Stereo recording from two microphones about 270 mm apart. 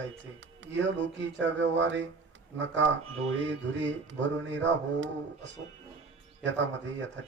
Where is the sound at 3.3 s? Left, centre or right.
Right.